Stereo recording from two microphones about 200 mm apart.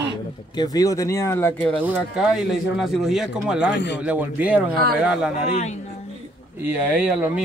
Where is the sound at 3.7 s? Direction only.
60° left (ahead or behind).